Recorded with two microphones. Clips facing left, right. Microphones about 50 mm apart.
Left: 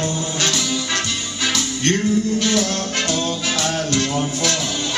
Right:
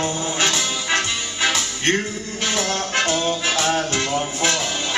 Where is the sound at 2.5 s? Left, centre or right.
Right.